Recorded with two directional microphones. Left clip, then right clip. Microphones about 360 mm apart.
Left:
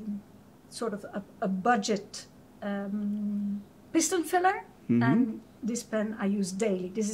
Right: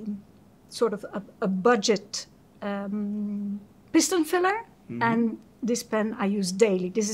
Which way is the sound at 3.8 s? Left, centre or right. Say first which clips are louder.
Right 5 dB; right.